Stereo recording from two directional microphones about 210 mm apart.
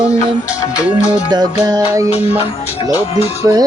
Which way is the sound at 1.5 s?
20° right (ahead or behind).